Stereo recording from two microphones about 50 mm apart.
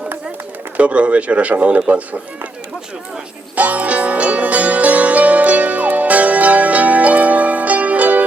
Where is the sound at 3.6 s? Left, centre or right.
Right.